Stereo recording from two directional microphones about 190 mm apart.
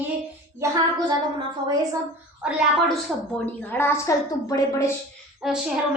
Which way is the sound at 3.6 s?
10° left (ahead or behind).